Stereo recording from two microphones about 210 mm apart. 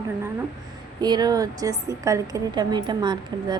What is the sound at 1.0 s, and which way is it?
A woman's voice, 20° right (ahead or behind).